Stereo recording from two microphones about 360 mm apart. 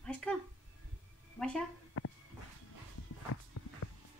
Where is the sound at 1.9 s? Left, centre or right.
Left.